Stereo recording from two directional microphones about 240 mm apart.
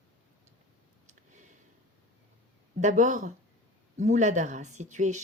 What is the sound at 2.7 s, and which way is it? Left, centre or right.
Speech, right.